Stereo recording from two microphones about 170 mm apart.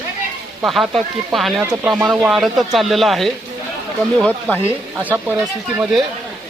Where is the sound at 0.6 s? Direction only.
Centre (ahead or behind).